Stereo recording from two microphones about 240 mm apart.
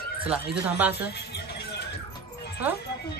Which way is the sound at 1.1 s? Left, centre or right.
Left.